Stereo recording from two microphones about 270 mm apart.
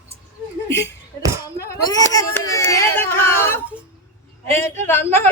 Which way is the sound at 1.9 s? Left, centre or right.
Centre.